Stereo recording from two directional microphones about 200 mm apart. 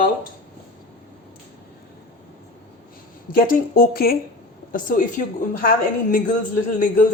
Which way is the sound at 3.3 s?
45° left (ahead or behind).